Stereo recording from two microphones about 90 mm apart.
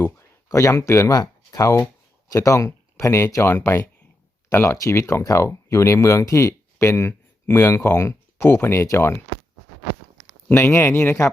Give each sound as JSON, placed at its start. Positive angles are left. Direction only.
{"t": 0.4, "sound": "speech", "side_deg": 35}
{"t": 10.5, "sound": "speech", "side_deg": 30}